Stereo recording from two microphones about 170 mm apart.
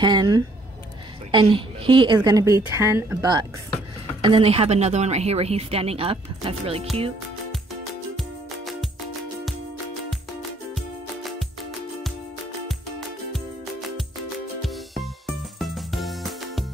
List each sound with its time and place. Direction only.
0.0 s a woman's voice: 25° right (ahead or behind)
4.2 s speech: 35° right (ahead or behind)
13.3 s music: centre (ahead or behind)